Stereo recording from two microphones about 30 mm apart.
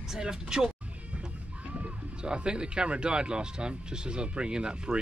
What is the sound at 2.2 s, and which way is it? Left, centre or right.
Speech, right.